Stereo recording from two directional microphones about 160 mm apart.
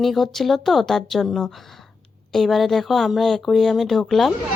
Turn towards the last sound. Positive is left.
turn(degrees=0)  # may be behind; listen again after turning